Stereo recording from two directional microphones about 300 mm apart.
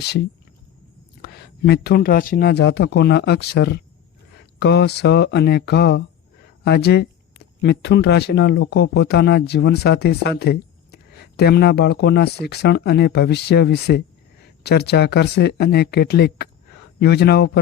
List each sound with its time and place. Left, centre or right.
1.2 s speech: left